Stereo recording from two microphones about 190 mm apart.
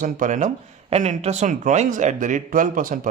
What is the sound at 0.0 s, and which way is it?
Speech, 40° right (ahead or behind).